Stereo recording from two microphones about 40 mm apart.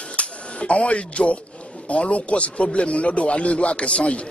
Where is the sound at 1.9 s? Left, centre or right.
Left.